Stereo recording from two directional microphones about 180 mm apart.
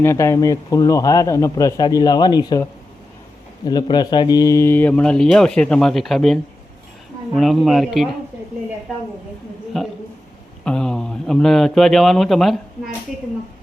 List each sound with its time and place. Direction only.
0.0 s a man's voice: 15° left (ahead or behind)
3.7 s speech: 25° left (ahead or behind); by 8.1 s centre (ahead or behind)
9.7 s speech: centre (ahead or behind)